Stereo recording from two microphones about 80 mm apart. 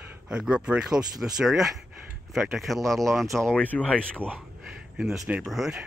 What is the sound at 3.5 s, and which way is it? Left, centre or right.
Speech, centre.